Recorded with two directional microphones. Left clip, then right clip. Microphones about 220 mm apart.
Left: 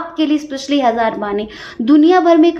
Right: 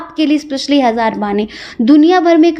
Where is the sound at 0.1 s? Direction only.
40° right (ahead or behind).